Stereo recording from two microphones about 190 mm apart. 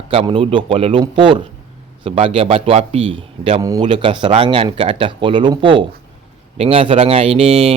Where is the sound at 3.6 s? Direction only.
20° right (ahead or behind).